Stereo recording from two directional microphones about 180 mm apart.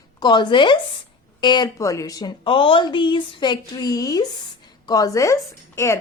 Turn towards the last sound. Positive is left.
turn(degrees=15)  # may be behind; listen again after turning